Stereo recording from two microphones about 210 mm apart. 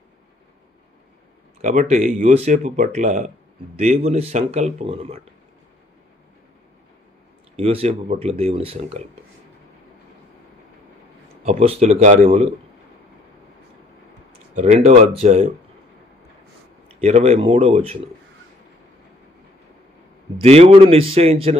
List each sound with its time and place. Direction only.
1.6 s speech: 40° right (ahead or behind)
7.5 s speech: 30° right (ahead or behind)
11.4 s speech: 30° right (ahead or behind)
14.5 s speech: 35° right (ahead or behind)
17.0 s speech: 30° right (ahead or behind)
20.3 s speech: 30° right (ahead or behind)